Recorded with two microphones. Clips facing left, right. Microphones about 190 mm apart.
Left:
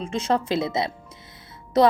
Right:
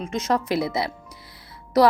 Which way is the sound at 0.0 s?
30° left (ahead or behind).